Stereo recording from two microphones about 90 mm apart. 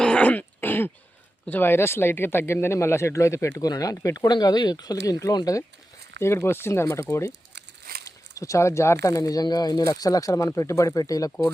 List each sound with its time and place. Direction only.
0.0 s throat clearing: 15° left (ahead or behind)
1.5 s speech: 20° left (ahead or behind); by 4.4 s 40° left (ahead or behind)
4.4 s speech: 55° left (ahead or behind)
6.2 s speech: 30° left (ahead or behind)